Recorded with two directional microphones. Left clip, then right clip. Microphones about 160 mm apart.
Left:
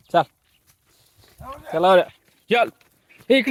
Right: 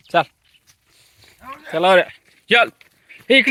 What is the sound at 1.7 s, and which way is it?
Speech, 5° left (ahead or behind).